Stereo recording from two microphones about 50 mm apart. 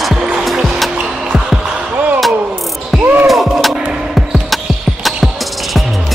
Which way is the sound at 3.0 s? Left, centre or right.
Right.